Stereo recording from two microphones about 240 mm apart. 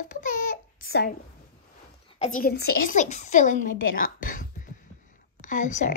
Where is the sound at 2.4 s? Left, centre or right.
Left.